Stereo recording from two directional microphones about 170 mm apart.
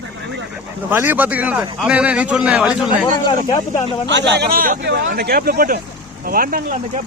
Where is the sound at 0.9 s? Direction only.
10° right (ahead or behind).